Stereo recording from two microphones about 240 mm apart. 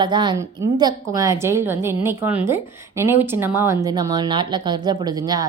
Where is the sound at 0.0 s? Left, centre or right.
Centre.